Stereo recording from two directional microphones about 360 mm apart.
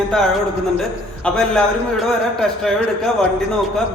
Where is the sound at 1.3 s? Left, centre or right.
Centre.